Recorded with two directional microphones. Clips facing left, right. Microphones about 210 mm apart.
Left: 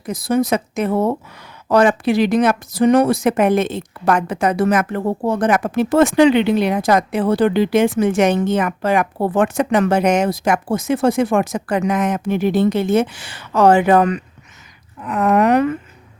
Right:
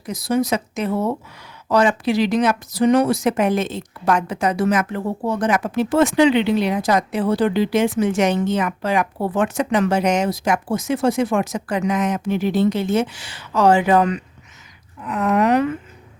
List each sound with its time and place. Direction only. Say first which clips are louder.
0.0 s a woman's voice: left 2 dB; 50° left (ahead or behind)